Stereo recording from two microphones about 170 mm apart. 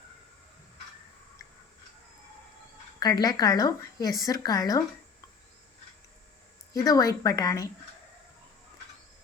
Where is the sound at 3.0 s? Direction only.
20° left (ahead or behind).